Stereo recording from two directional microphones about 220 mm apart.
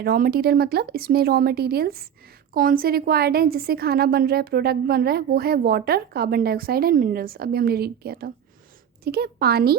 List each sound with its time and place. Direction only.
0.0 s speech: 45° right (ahead or behind)